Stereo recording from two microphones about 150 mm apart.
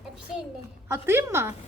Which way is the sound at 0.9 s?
15° right (ahead or behind).